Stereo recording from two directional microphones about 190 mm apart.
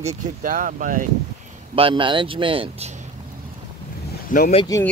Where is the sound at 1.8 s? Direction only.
25° right (ahead or behind).